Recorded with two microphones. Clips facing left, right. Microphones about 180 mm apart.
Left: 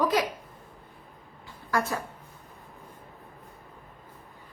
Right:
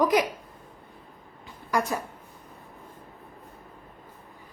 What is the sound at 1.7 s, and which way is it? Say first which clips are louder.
Speech: right 1 dB; 15° right (ahead or behind).